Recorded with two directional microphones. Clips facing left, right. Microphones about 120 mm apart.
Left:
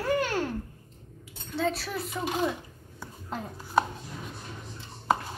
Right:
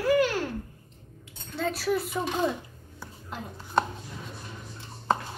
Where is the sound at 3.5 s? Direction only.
5° left (ahead or behind).